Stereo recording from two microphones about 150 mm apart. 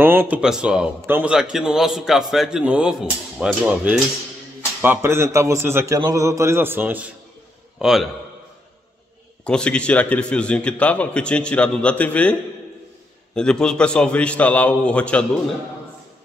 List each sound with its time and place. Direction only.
0.0 s a man's voice: 15° right (ahead or behind)
7.8 s a man's voice: centre (ahead or behind)
9.4 s a man's voice: 5° left (ahead or behind)